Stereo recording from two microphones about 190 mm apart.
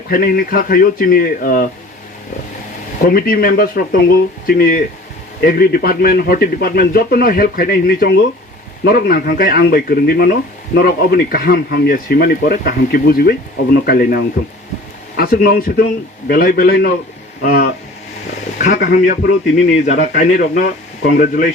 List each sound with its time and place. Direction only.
0.1 s a man's voice: 50° left (ahead or behind)
3.0 s a man's voice: 50° left (ahead or behind)